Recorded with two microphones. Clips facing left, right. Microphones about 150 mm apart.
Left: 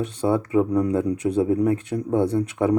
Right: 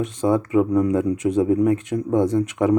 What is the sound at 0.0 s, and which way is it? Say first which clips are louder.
Speech: right 2 dB; 35° left (ahead or behind).